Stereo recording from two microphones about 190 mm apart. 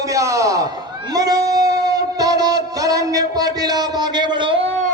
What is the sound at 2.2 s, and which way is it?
Speech, 20° right (ahead or behind).